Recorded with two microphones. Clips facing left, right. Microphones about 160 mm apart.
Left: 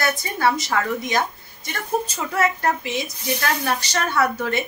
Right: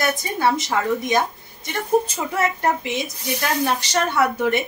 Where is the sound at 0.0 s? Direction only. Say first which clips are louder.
Right 1 dB; 20° right (ahead or behind).